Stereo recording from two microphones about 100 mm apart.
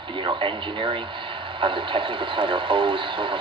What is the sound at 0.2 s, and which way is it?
Speech, 60° right (ahead or behind).